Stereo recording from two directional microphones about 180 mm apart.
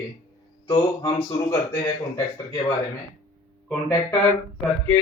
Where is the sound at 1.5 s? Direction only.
20° left (ahead or behind).